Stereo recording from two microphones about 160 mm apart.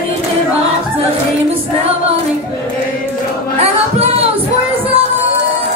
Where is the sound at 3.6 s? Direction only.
40° right (ahead or behind).